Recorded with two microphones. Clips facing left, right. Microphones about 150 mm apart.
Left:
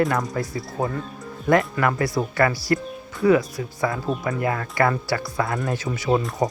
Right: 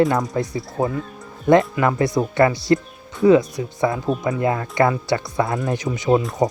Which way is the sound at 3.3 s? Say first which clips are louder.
Right 4 dB; 20° right (ahead or behind).